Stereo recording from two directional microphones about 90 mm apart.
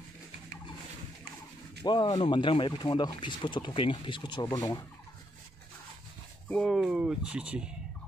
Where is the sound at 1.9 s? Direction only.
60° left (ahead or behind).